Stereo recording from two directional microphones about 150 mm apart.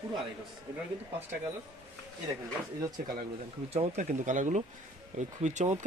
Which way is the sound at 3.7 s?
55° right (ahead or behind).